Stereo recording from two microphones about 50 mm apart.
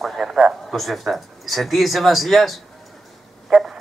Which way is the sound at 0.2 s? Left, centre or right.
Centre.